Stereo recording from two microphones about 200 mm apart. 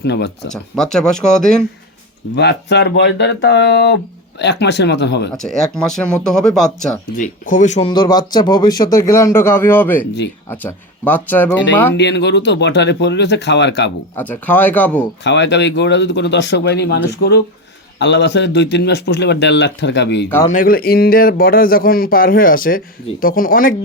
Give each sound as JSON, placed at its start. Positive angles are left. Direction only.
{"t": 0.0, "sound": "speech", "side_deg": 60}
{"t": 0.5, "sound": "speech", "side_deg": 5}
{"t": 2.3, "sound": "speech", "side_deg": 55}
{"t": 5.3, "sound": "speech", "side_deg": 0}
{"t": 7.2, "sound": "speech", "side_deg": 40}
{"t": 7.9, "sound": "speech", "side_deg": 20}
{"t": 11.9, "sound": "speech", "side_deg": 60}
{"t": 14.2, "sound": "speech", "side_deg": 10}
{"t": 15.2, "sound": "speech", "side_deg": 60}
{"t": 20.5, "sound": "speech", "side_deg": 45}